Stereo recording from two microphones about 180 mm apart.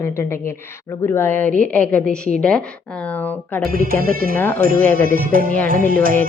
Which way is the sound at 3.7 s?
50° right (ahead or behind).